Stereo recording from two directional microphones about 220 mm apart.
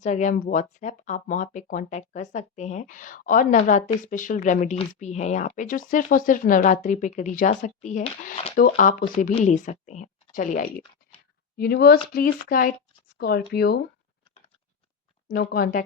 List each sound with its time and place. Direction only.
0.0 s a woman's voice: 35° left (ahead or behind)
15.3 s speech: 40° left (ahead or behind)